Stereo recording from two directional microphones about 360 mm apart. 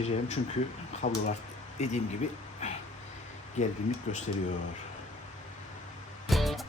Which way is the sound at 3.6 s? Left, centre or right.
Centre.